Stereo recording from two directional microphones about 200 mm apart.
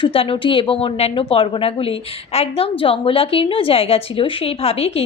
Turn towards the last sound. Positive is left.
turn(degrees=30)  # may be behind; listen again after turning